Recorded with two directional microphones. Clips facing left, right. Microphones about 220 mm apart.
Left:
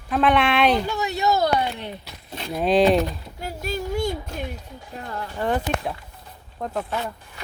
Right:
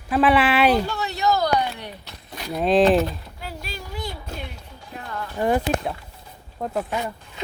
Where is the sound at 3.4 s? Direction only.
45° left (ahead or behind).